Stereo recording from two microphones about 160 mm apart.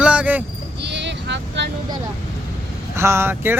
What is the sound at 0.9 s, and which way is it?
Vehicle, 90° right.